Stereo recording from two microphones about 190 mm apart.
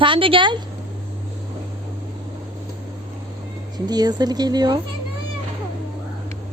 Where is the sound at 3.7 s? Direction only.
20° right (ahead or behind).